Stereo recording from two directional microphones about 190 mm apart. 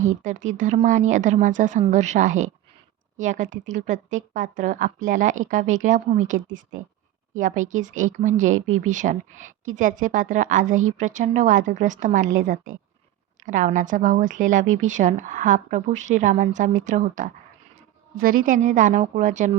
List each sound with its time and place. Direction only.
0.2 s speech: 40° right (ahead or behind)
8.5 s speech: 90° right
8.9 s speech: 40° right (ahead or behind)